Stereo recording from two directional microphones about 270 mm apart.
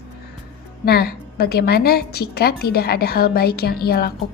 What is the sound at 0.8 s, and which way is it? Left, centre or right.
A woman's voice, left.